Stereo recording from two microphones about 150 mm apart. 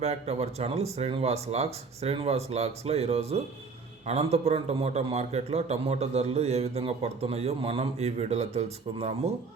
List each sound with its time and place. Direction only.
0.0 s a man's voice: 45° right (ahead or behind)